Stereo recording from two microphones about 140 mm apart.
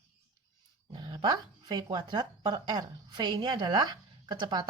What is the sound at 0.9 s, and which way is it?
A woman's voice, 35° right (ahead or behind).